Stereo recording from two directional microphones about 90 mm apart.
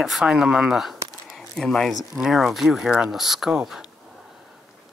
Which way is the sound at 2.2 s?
5° right (ahead or behind).